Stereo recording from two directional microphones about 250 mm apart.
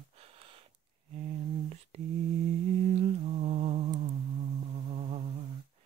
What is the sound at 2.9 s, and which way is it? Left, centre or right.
Humming, right.